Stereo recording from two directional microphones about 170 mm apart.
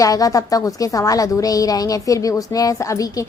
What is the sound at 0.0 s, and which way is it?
A woman's voice, 20° left (ahead or behind).